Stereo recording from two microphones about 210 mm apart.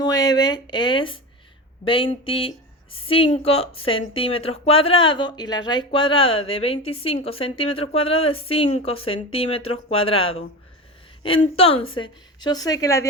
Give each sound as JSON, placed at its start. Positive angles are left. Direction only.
{"t": 0.0, "sound": "speech", "side_deg": 15}